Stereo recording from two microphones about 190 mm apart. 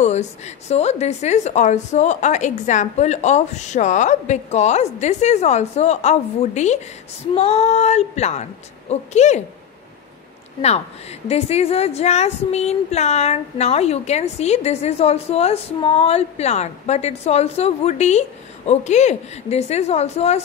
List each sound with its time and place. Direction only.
0.0 s a woman's voice: 35° left (ahead or behind)
10.6 s a woman's voice: 35° left (ahead or behind)